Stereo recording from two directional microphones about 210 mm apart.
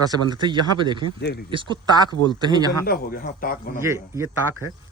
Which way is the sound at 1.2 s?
50° left (ahead or behind).